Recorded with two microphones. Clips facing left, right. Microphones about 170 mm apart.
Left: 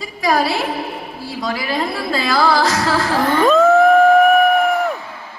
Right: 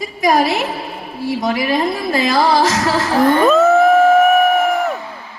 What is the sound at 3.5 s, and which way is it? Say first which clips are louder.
Crowd: left 3 dB; 5° right (ahead or behind).